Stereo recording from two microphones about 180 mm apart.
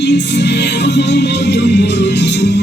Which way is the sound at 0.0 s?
70° left (ahead or behind).